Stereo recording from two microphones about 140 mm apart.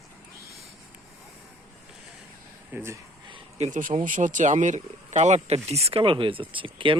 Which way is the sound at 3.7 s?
70° right (ahead or behind).